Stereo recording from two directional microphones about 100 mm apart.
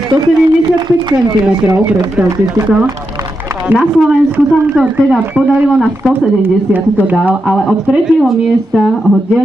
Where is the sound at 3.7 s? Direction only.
10° right (ahead or behind).